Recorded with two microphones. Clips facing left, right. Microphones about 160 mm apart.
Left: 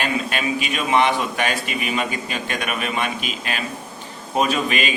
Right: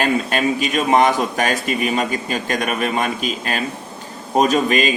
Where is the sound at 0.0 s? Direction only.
40° right (ahead or behind).